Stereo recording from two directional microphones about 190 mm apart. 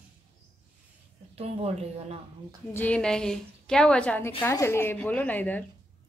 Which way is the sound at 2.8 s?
5° left (ahead or behind).